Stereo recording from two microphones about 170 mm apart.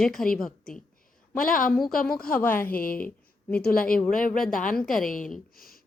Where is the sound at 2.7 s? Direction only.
55° left (ahead or behind).